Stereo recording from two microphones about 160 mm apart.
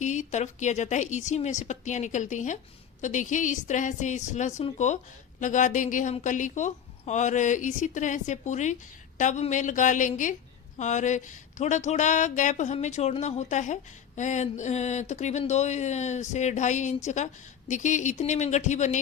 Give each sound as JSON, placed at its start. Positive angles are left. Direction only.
{"t": 0.0, "sound": "a woman's voice", "side_deg": 45}